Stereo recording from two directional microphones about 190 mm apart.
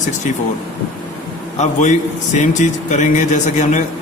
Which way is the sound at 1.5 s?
40° left (ahead or behind).